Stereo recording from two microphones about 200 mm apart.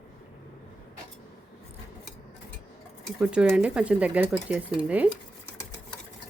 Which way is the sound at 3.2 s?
5° right (ahead or behind).